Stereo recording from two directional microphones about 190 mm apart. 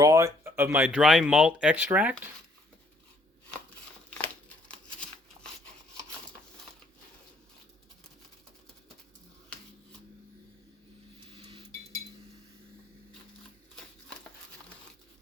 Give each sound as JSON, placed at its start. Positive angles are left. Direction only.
{"t": 0.0, "sound": "speech", "side_deg": -15}
{"t": 4.7, "sound": "crumpling", "side_deg": 5}
{"t": 11.3, "sound": "cutlery", "side_deg": -30}